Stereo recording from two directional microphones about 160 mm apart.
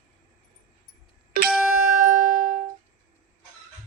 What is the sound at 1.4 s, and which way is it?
Music, 5° right (ahead or behind).